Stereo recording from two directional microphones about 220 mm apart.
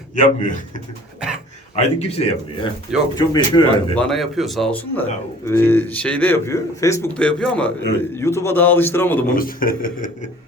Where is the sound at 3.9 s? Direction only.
5° left (ahead or behind).